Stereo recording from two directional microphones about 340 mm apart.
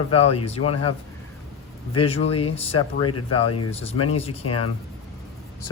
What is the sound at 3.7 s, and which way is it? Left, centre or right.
Speech, centre.